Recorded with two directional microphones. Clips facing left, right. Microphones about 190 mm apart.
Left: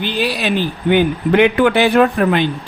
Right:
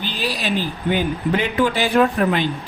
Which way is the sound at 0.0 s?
65° left (ahead or behind).